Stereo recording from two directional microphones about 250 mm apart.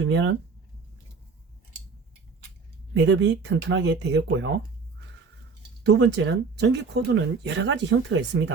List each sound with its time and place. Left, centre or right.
0.0 s speech: right
2.9 s speech: right
5.8 s speech: right